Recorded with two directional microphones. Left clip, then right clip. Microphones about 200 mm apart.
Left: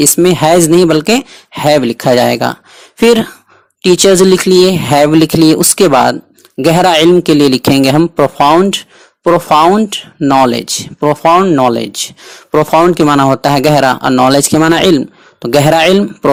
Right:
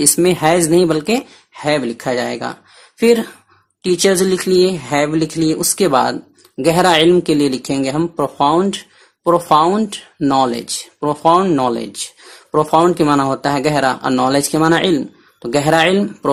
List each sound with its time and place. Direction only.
0.0 s speech: 30° left (ahead or behind)
9.7 s speech: 20° left (ahead or behind)